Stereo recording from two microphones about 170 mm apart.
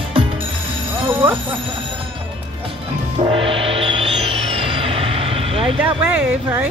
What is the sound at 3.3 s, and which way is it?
Music, 30° right (ahead or behind).